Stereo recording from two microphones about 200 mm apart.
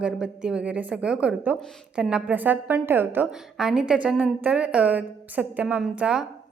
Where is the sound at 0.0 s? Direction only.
5° right (ahead or behind).